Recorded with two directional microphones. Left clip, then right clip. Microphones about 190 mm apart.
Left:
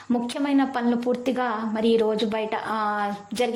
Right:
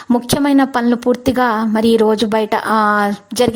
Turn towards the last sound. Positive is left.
turn(degrees=-40)  # may be behind; listen again after turning